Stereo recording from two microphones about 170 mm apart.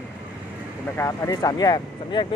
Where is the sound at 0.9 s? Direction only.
15° left (ahead or behind).